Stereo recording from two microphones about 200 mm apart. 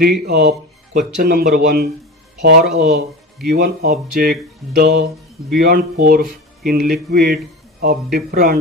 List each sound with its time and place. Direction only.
0.0 s speech: 55° right (ahead or behind)